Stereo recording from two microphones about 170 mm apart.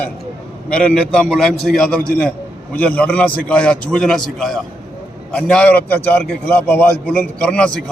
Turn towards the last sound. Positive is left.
turn(degrees=5)  # may be behind; listen again after turning